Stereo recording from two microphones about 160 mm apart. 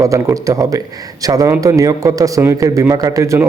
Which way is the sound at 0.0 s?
20° right (ahead or behind).